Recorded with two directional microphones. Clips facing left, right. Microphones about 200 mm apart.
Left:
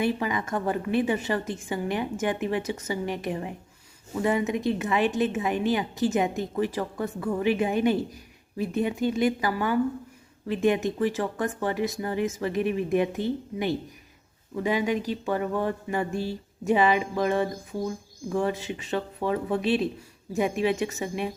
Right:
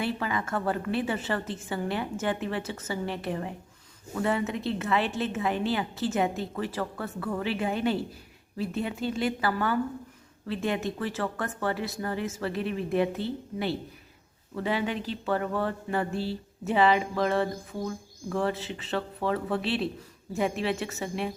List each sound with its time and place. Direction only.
0.0 s speech: 15° left (ahead or behind)